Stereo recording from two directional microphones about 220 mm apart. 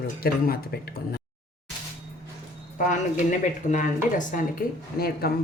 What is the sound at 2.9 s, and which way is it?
A woman's voice, 35° left (ahead or behind).